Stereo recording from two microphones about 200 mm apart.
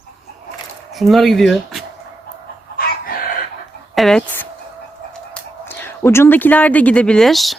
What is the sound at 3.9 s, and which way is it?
Speech, centre (ahead or behind).